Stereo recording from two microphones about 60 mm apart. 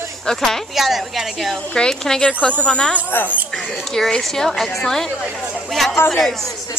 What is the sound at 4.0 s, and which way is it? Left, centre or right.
A woman's voice, centre.